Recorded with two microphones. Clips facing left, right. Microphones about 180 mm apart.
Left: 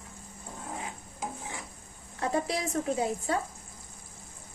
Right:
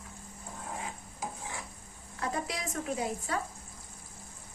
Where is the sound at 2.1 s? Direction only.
30° left (ahead or behind).